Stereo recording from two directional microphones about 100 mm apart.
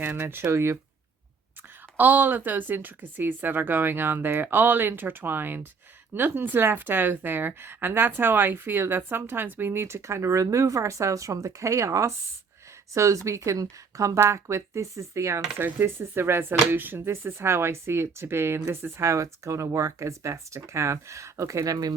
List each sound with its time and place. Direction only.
0.0 s a woman's voice: 20° right (ahead or behind)
2.0 s a woman's voice: 20° right (ahead or behind); by 21.9 s 35° right (ahead or behind)